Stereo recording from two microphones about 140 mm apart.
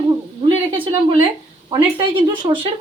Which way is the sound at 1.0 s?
35° right (ahead or behind).